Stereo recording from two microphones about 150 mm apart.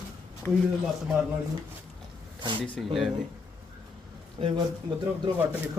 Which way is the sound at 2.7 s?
Centre (ahead or behind).